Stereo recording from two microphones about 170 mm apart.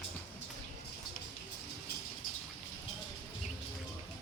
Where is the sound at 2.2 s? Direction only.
55° left (ahead or behind).